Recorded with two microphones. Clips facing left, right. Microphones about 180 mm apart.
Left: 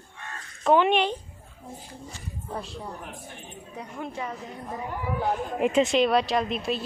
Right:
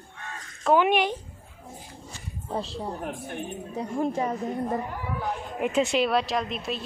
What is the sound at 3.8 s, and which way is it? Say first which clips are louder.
Speech: right 8 dB; 40° right (ahead or behind).